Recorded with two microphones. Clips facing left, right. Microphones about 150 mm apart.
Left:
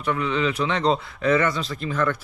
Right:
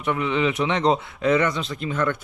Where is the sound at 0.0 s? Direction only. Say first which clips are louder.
Right 1 dB; 20° right (ahead or behind).